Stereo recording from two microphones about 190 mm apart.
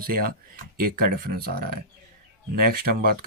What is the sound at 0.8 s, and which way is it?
Speech, 50° right (ahead or behind).